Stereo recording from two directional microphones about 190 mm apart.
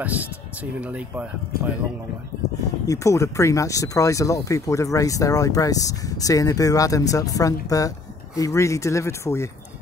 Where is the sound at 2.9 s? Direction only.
15° left (ahead or behind).